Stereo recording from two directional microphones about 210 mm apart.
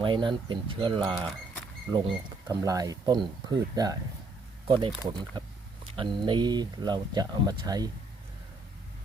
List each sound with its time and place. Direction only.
0.0 s speech: 20° right (ahead or behind)
2.5 s speech: 15° right (ahead or behind)